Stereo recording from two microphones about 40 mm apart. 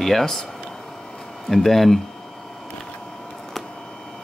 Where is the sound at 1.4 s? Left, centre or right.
Centre.